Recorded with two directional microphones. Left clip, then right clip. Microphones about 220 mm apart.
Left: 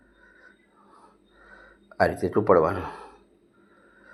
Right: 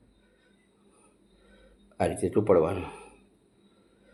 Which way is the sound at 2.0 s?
20° right (ahead or behind).